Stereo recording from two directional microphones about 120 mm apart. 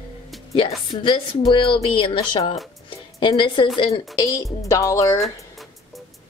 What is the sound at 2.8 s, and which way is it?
Music, 45° left (ahead or behind).